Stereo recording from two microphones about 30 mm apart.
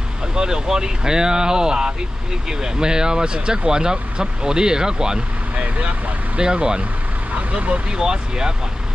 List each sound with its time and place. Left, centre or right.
0.3 s vehicle: right
0.7 s speech: right
5.6 s speech: right
6.4 s speech: right
7.3 s speech: right
7.9 s speech: right